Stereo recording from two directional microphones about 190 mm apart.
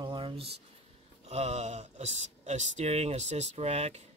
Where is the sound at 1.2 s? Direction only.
35° right (ahead or behind).